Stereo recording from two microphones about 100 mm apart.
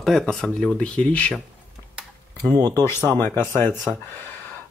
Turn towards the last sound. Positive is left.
turn(degrees=25)  # may be behind; listen again after turning